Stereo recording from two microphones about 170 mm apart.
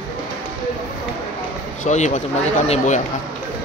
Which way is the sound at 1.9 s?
45° left (ahead or behind).